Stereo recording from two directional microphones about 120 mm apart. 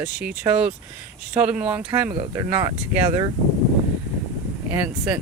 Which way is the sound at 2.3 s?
30° right (ahead or behind).